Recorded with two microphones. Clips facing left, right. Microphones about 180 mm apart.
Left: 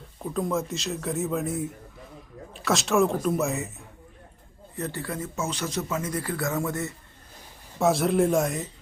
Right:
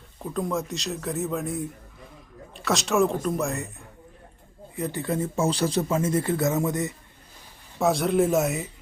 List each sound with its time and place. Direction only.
0.2 s speech: centre (ahead or behind)
4.8 s speech: 15° right (ahead or behind)
7.8 s speech: centre (ahead or behind)